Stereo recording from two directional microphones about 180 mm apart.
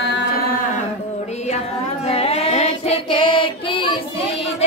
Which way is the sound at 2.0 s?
35° left (ahead or behind).